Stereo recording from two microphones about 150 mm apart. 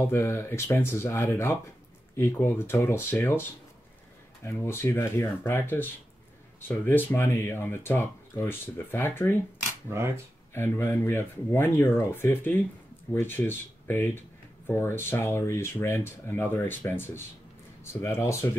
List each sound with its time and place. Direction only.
0.0 s speech: 15° left (ahead or behind)
4.5 s speech: 15° left (ahead or behind)
6.9 s speech: 15° left (ahead or behind)
10.5 s speech: 15° left (ahead or behind)